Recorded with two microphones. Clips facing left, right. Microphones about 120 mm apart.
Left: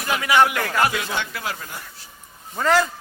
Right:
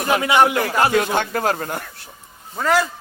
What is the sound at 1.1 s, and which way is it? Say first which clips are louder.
Speech: right 8 dB; 50° right (ahead or behind).